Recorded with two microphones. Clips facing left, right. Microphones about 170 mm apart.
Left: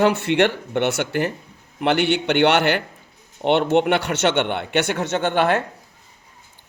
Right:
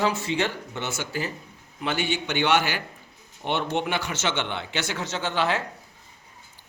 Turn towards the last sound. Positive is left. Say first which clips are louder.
# left 7 dB
turn(degrees=55)  # may be behind; listen again after turning